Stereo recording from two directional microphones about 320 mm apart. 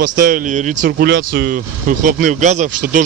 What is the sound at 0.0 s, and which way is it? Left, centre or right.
Speech, right.